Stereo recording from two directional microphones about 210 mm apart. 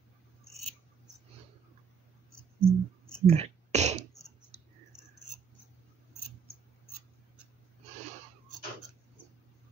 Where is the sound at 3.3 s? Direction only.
30° right (ahead or behind).